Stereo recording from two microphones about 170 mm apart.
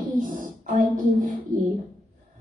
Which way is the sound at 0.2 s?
50° right (ahead or behind).